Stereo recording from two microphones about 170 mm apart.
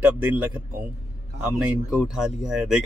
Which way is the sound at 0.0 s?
10° right (ahead or behind).